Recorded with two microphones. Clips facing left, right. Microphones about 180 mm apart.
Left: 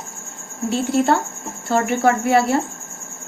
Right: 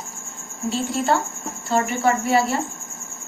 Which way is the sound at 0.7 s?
60° left (ahead or behind).